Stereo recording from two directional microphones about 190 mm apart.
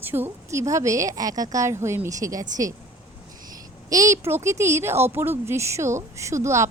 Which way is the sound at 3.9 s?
15° right (ahead or behind).